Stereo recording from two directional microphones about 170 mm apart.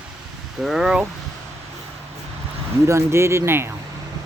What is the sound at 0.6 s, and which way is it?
Speech, 5° right (ahead or behind).